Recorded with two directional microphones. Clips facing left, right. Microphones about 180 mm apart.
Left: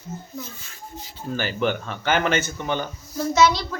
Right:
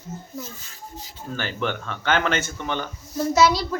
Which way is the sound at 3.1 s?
30° right (ahead or behind).